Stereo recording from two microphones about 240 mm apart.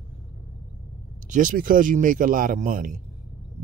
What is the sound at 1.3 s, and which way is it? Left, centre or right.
Speech, right.